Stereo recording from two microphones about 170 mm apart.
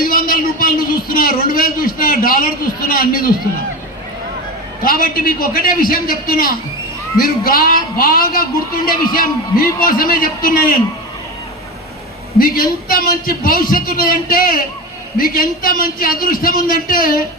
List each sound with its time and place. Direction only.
0.0 s a sound: 55° left (ahead or behind)
2.9 s a man's voice: 55° left (ahead or behind)
4.9 s a man's voice: 60° left (ahead or behind)
12.4 s a man's voice: 55° left (ahead or behind)